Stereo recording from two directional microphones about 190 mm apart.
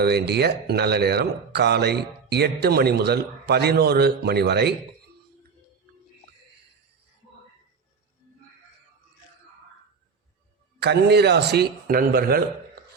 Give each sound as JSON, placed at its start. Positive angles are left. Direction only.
{"t": 0.0, "sound": "speech", "side_deg": -60}
{"t": 10.8, "sound": "speech", "side_deg": -60}